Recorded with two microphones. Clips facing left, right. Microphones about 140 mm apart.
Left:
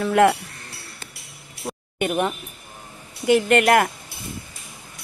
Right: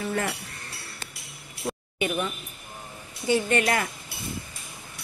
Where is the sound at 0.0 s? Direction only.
75° left (ahead or behind).